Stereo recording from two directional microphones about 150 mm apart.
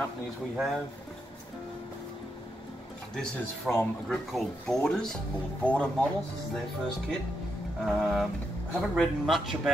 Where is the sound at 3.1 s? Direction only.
5° left (ahead or behind).